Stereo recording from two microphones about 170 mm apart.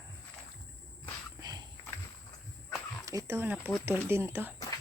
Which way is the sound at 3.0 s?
20° right (ahead or behind).